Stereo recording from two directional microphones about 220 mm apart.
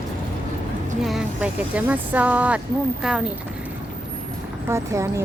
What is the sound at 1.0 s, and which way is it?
A woman's voice, 5° right (ahead or behind).